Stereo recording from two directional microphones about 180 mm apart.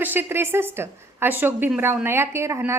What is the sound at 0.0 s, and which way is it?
A woman's voice, 10° right (ahead or behind).